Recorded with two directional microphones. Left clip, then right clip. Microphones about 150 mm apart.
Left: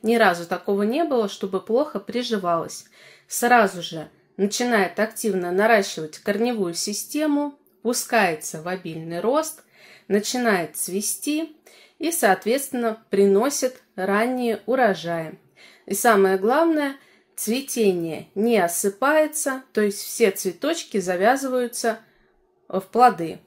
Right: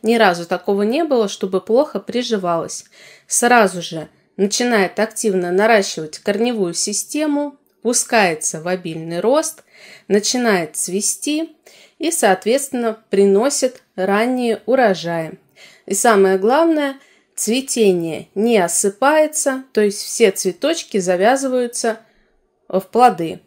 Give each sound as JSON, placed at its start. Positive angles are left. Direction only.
{"t": 0.0, "sound": "speech", "side_deg": -35}